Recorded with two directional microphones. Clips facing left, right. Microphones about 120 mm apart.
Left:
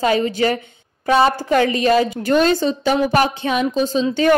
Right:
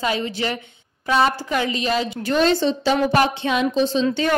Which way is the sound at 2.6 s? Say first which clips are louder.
Left 1 dB; 45° left (ahead or behind).